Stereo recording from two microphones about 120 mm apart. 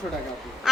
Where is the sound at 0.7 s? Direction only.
5° right (ahead or behind).